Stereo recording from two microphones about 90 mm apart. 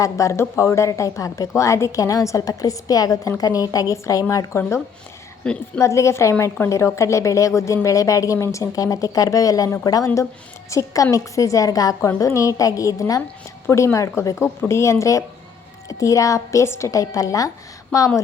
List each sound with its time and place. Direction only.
0.0 s a woman's voice: 35° left (ahead or behind)
5.5 s a woman's voice: 10° left (ahead or behind)
5.8 s a woman's voice: 35° left (ahead or behind)